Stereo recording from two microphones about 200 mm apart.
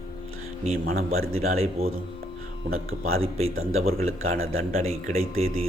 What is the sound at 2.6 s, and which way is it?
Speech, 45° right (ahead or behind).